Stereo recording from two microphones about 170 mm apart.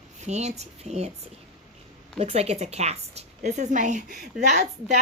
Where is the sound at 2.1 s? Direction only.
40° right (ahead or behind).